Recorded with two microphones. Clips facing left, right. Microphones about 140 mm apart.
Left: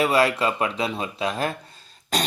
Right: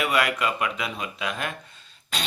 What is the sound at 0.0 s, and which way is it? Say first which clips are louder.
Speech: left 4 dB; 30° left (ahead or behind).